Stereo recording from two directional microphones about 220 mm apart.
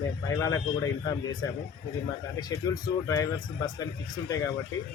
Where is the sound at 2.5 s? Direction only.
15° left (ahead or behind).